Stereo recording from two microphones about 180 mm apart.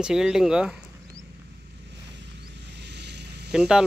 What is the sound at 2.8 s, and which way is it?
Vehicle, 70° right (ahead or behind).